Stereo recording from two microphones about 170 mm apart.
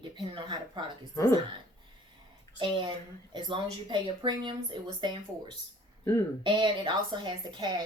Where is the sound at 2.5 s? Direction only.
30° right (ahead or behind).